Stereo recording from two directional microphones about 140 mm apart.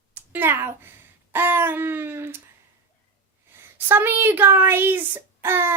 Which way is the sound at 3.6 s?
15° right (ahead or behind).